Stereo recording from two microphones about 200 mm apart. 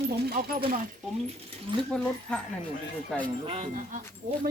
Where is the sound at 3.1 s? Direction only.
10° left (ahead or behind).